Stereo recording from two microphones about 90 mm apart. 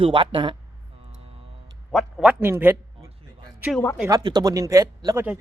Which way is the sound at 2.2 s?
25° right (ahead or behind).